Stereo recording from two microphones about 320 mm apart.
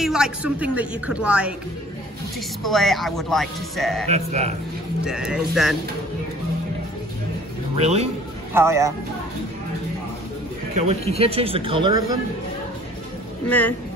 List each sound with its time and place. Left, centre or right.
0.0 s speech: centre
2.6 s speech: centre
4.1 s speech: right
5.0 s speech: centre
7.7 s speech: centre
8.5 s speech: centre
11.1 s speech: centre
13.5 s speech: centre